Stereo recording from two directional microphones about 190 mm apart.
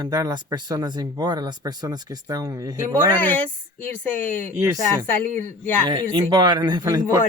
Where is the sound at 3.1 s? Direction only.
10° left (ahead or behind).